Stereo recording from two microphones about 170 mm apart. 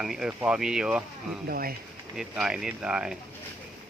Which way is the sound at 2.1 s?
5° right (ahead or behind).